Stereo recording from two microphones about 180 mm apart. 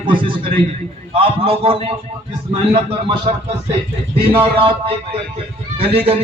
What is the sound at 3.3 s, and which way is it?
Speech, 40° right (ahead or behind).